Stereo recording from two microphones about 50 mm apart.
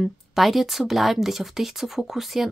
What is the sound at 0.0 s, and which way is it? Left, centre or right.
Speech, centre.